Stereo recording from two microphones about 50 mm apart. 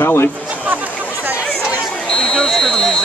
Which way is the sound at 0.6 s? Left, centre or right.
Right.